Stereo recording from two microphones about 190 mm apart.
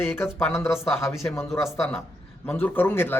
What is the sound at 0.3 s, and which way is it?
Speech, 10° left (ahead or behind).